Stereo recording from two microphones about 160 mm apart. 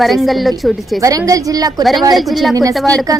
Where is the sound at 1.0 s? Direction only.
20° right (ahead or behind).